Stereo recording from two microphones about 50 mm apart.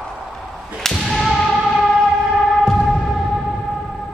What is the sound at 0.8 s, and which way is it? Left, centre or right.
Whip, centre.